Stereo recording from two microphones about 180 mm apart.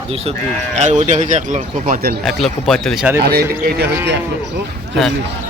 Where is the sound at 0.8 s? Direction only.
40° right (ahead or behind).